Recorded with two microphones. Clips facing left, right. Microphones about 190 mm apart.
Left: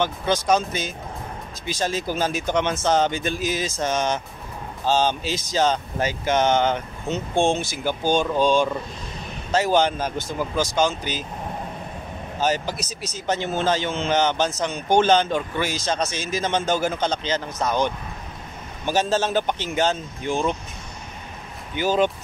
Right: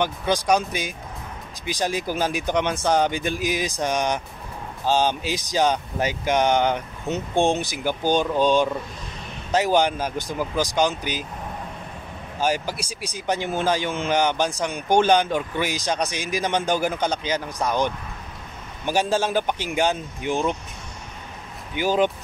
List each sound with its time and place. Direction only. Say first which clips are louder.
0.0 s a man's voice: even; 15° right (ahead or behind)
12.4 s a man's voice: even; 10° right (ahead or behind)
21.7 s a man's voice: even; 15° right (ahead or behind)